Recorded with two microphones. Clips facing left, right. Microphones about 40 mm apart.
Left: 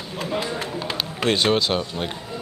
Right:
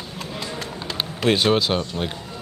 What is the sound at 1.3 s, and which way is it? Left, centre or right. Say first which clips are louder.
Speech: right 1 dB; centre.